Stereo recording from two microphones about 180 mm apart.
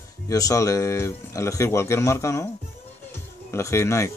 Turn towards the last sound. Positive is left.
turn(degrees=15)  # may be behind; listen again after turning